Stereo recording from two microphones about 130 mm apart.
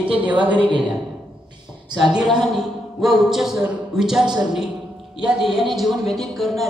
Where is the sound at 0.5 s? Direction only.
40° right (ahead or behind).